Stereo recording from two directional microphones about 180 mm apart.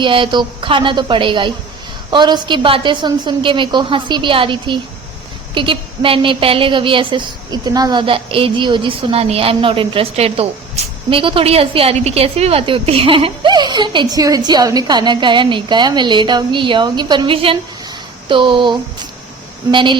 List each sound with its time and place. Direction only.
0.0 s a woman's voice: 25° right (ahead or behind)
10.8 s a sound: 35° right (ahead or behind)
11.1 s a woman's voice: 30° right (ahead or behind)